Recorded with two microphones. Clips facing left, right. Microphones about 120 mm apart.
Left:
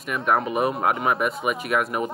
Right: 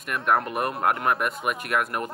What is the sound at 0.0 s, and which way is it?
Speech, centre (ahead or behind).